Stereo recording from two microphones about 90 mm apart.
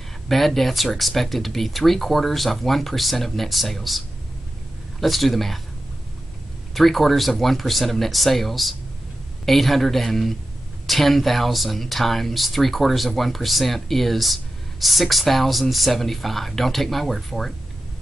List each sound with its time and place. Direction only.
0.3 s speech: centre (ahead or behind)
5.0 s speech: centre (ahead or behind)
6.7 s speech: centre (ahead or behind)